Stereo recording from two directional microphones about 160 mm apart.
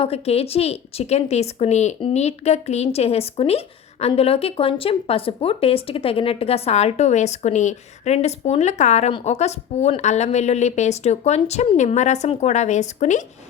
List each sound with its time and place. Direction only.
0.0 s a woman's voice: 40° left (ahead or behind)